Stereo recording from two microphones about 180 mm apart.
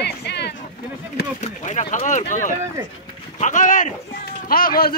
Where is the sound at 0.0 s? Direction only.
70° left (ahead or behind).